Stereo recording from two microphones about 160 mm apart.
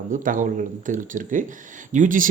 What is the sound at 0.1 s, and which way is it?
Speech, 55° right (ahead or behind).